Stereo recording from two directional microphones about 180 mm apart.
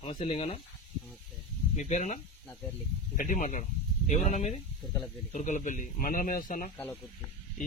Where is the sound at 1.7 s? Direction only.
40° left (ahead or behind).